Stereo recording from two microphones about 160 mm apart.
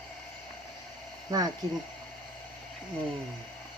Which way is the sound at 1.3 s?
25° right (ahead or behind).